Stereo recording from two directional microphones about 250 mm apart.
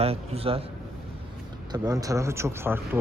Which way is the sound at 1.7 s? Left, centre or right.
Centre.